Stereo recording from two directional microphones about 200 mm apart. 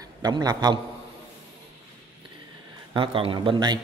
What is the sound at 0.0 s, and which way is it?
Speech, 20° right (ahead or behind).